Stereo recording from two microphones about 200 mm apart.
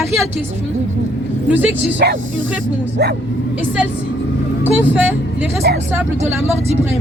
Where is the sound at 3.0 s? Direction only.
55° right (ahead or behind).